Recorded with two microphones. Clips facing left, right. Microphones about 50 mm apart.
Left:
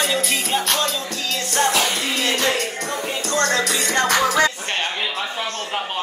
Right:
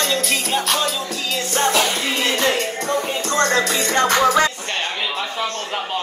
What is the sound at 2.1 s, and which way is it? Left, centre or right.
Music, right.